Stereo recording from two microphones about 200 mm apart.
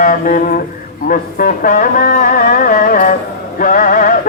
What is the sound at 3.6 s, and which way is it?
Music, 45° left (ahead or behind).